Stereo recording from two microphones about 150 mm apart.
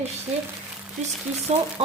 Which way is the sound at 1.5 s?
45° right (ahead or behind).